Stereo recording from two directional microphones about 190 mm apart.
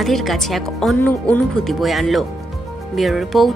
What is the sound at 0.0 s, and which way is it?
Speech, centre (ahead or behind).